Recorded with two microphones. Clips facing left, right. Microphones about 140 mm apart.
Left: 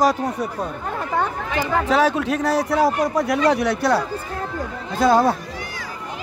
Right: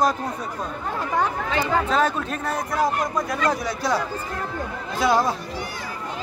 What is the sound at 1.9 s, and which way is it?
A man's voice, 80° left.